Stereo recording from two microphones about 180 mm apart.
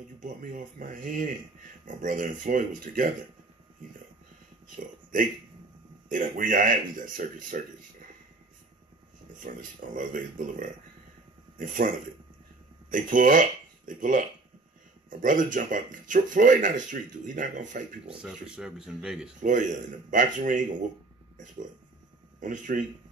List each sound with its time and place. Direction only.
0.2 s speech: 50° right (ahead or behind)
6.0 s speech: 50° right (ahead or behind)
9.3 s speech: 50° right (ahead or behind)
12.9 s speech: 50° right (ahead or behind)
18.2 s speech: 5° right (ahead or behind)
19.4 s speech: 45° right (ahead or behind)
22.4 s speech: 45° right (ahead or behind)